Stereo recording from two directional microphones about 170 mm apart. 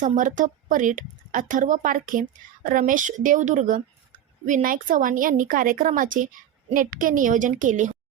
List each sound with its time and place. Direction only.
0.0 s speech: 50° right (ahead or behind)